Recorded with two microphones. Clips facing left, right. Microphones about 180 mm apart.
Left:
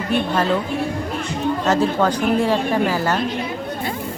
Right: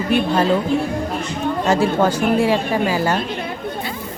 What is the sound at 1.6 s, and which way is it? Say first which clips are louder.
A woman's voice: right 2 dB; 10° right (ahead or behind).